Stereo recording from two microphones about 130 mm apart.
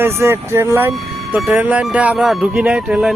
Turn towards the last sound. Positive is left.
turn(degrees=-5)  # may be behind; listen again after turning